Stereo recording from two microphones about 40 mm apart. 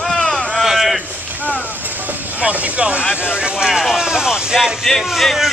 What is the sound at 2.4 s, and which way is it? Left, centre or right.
Speech, right.